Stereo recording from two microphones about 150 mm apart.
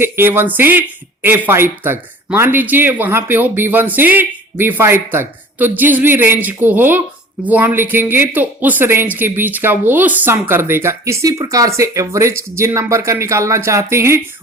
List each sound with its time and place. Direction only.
0.0 s speech: 15° right (ahead or behind)